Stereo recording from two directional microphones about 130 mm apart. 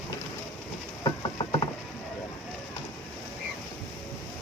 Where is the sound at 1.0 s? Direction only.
35° left (ahead or behind).